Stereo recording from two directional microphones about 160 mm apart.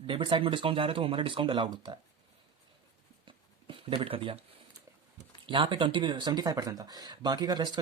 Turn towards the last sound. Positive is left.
turn(degrees=-25)  # may be behind; listen again after turning